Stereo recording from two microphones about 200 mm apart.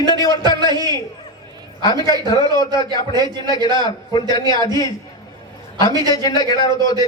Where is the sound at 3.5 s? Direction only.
20° left (ahead or behind).